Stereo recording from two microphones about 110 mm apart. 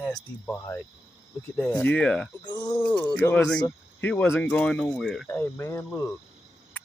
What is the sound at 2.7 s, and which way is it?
Speech, 15° left (ahead or behind).